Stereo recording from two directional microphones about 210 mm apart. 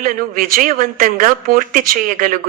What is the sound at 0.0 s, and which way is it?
A woman's voice, 45° right (ahead or behind).